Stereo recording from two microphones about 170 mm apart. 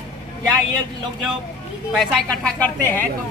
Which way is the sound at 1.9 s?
5° left (ahead or behind).